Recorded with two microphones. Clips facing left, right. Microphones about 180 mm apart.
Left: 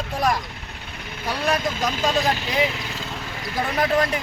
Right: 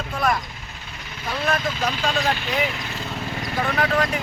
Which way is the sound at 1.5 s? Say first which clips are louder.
Left 1 dB; 40° left (ahead or behind).